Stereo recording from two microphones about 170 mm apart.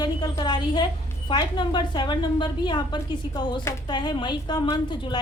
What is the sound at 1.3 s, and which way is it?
A woman's voice, 25° left (ahead or behind).